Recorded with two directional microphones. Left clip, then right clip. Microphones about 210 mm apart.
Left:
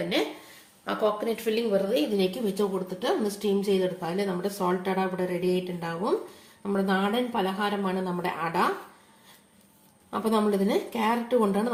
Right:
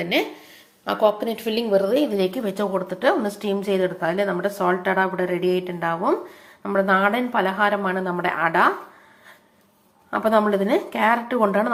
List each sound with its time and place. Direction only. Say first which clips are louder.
0.9 s a woman's voice: right 6 dB; 20° right (ahead or behind)
10.2 s a woman's voice: right 7 dB; 20° right (ahead or behind)